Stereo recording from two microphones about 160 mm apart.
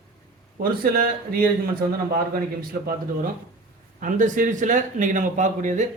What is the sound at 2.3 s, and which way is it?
A man's voice, 65° right (ahead or behind).